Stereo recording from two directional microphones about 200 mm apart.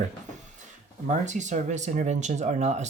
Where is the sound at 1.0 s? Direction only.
35° right (ahead or behind).